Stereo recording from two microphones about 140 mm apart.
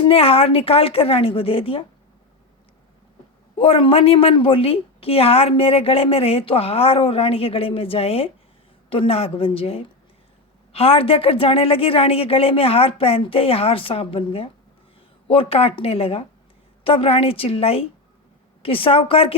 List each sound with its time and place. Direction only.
0.0 s a woman's voice: 45° left (ahead or behind)
3.6 s a woman's voice: 40° left (ahead or behind)